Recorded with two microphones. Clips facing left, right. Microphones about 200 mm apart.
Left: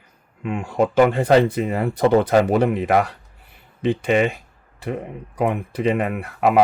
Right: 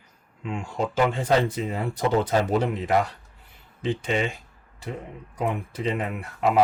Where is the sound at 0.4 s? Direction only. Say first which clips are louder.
Left 8 dB; 60° left (ahead or behind).